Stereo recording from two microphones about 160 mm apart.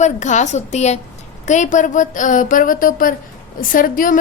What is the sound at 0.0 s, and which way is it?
A woman's voice, 45° left (ahead or behind).